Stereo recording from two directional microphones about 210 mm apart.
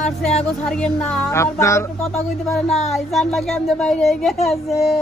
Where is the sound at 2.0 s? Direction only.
Centre (ahead or behind).